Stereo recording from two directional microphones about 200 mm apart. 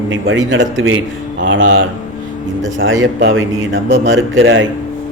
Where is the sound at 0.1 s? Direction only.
65° right (ahead or behind).